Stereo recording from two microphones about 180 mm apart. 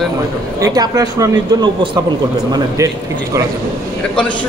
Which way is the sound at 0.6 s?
20° right (ahead or behind).